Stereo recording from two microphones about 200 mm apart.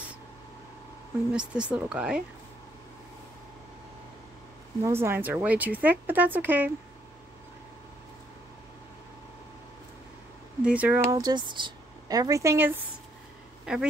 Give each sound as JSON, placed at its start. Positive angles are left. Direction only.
{"t": 1.3, "sound": "speech", "side_deg": -5}
{"t": 4.8, "sound": "speech", "side_deg": -10}
{"t": 10.6, "sound": "speech", "side_deg": -5}
{"t": 11.1, "sound": "speech", "side_deg": -20}